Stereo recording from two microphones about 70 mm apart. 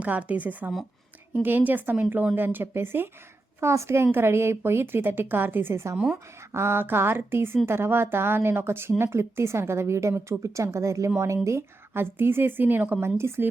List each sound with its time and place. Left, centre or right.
0.0 s a woman's voice: right